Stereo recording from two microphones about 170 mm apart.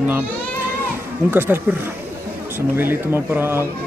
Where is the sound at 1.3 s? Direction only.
15° right (ahead or behind).